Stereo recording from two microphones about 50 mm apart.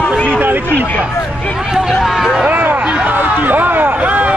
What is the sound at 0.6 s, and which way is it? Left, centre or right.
Speech, left.